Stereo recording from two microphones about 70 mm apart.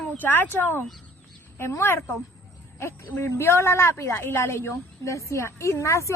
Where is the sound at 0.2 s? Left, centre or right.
Left.